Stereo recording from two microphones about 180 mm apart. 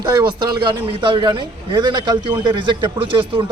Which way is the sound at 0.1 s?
20° right (ahead or behind).